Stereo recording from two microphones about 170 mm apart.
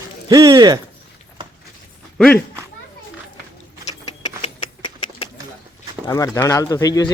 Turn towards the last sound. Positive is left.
turn(degrees=20)  # may be behind; listen again after turning